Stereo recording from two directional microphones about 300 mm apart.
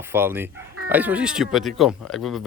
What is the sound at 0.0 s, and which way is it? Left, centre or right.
A man's voice, centre.